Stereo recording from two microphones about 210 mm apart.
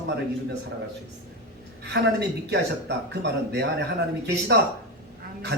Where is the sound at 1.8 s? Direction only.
55° right (ahead or behind).